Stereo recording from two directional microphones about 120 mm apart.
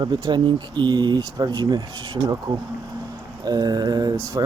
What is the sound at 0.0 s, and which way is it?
Speech, 40° right (ahead or behind).